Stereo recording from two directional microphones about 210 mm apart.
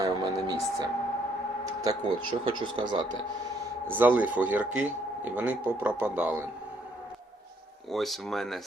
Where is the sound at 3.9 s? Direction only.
10° right (ahead or behind).